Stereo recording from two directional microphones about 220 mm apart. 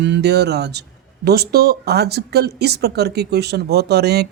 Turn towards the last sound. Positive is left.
turn(degrees=-50)  # may be behind; listen again after turning